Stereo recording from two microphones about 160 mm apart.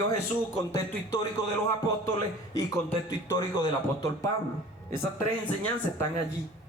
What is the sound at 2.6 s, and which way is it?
A man's voice, 20° left (ahead or behind).